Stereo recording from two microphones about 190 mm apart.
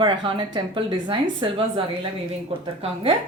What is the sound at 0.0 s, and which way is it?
A woman's voice, 25° right (ahead or behind).